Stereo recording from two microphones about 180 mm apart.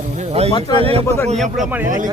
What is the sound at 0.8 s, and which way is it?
Speech, 30° right (ahead or behind).